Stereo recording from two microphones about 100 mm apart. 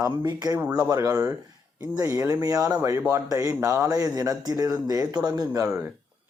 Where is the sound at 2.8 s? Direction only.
30° right (ahead or behind).